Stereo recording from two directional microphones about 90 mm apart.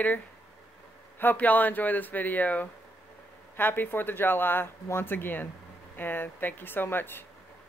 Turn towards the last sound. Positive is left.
turn(degrees=25)  # may be behind; listen again after turning